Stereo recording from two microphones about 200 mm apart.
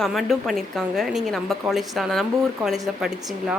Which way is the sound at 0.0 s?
Centre (ahead or behind).